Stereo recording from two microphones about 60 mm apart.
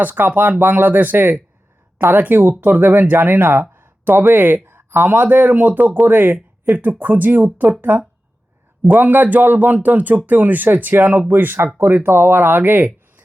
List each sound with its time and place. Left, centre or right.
0.0 s speech: right